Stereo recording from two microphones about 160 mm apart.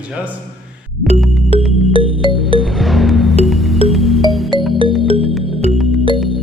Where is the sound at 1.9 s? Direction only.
30° right (ahead or behind).